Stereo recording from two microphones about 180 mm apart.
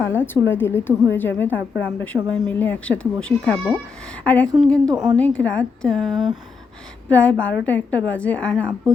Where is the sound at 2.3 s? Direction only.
10° left (ahead or behind).